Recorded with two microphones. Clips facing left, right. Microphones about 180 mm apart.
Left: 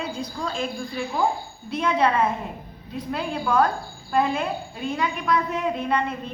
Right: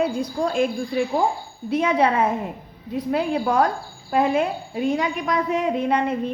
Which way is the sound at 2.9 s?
70° right (ahead or behind).